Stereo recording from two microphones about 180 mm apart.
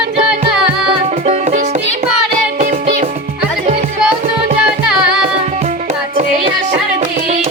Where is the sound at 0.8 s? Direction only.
40° right (ahead or behind).